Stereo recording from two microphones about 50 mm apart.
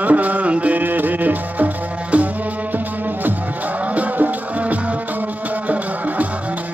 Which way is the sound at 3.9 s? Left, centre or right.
Right.